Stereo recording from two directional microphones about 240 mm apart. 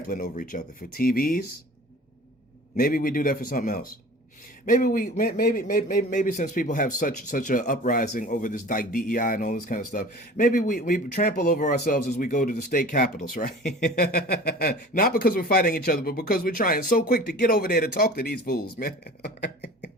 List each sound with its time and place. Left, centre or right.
0.1 s a man's voice: left
2.7 s a man's voice: left